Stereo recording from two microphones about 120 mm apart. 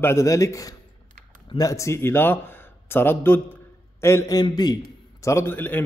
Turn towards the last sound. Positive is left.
turn(degrees=15)  # may be behind; listen again after turning